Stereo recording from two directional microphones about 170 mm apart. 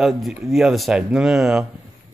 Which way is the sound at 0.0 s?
Centre (ahead or behind).